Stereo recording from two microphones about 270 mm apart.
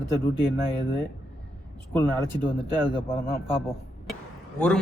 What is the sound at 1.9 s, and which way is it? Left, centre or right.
Speech, centre.